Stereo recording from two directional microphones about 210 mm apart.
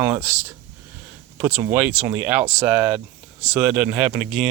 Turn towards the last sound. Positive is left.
turn(degrees=-5)  # may be behind; listen again after turning